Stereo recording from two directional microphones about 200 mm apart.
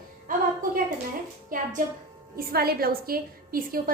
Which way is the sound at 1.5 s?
40° right (ahead or behind).